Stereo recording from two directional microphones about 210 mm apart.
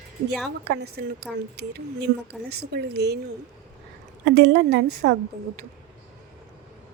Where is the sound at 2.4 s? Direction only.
50° right (ahead or behind).